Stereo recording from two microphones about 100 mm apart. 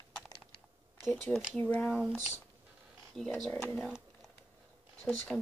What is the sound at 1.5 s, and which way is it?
Speech, 15° left (ahead or behind).